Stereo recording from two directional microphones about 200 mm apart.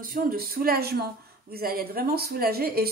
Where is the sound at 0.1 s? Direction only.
45° right (ahead or behind).